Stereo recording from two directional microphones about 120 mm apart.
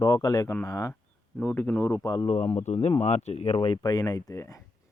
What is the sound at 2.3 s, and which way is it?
Speech, 60° left (ahead or behind).